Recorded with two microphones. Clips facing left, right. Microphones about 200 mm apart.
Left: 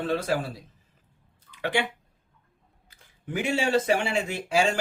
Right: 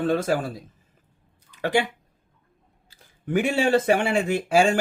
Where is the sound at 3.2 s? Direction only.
55° right (ahead or behind).